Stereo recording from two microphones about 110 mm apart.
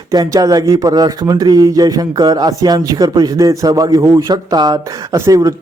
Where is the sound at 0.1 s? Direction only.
35° right (ahead or behind).